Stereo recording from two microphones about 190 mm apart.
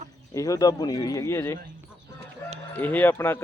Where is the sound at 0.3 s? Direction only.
20° left (ahead or behind).